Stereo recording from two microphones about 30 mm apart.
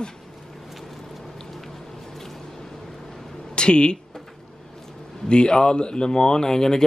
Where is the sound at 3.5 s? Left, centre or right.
Left.